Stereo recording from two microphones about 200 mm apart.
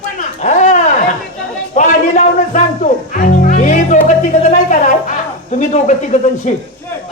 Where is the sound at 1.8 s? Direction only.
40° left (ahead or behind).